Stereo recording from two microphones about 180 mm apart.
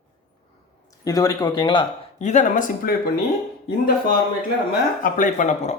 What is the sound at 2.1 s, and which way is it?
Speech, 40° left (ahead or behind).